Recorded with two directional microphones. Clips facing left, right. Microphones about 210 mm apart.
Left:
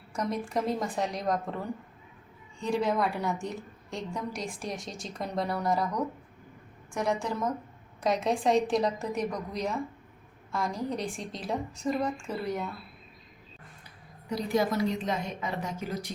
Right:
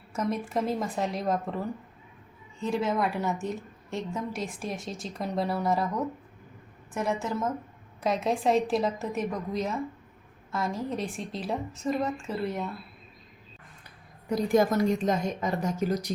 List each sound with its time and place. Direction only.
0.1 s a woman's voice: 5° right (ahead or behind)
14.3 s a woman's voice: 50° right (ahead or behind)